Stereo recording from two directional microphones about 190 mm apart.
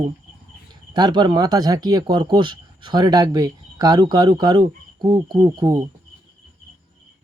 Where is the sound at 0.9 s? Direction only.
25° right (ahead or behind).